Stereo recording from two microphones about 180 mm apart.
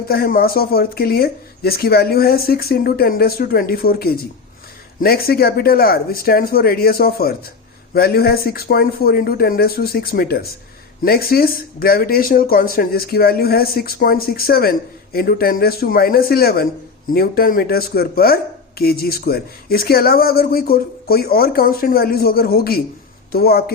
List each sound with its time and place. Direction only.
0.1 s speech: 55° left (ahead or behind)